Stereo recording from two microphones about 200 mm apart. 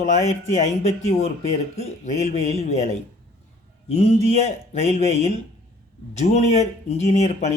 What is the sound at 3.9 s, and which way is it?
Speech, 30° left (ahead or behind).